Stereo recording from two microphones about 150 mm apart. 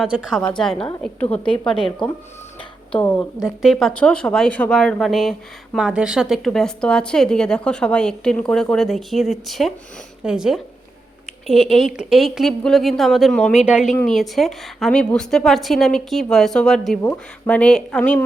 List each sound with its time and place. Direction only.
0.0 s a woman's voice: centre (ahead or behind)